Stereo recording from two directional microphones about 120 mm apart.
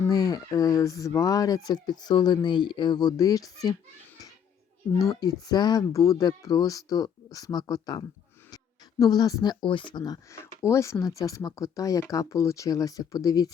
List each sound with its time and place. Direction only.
0.1 s speech: 30° left (ahead or behind)
4.9 s speech: 30° left (ahead or behind)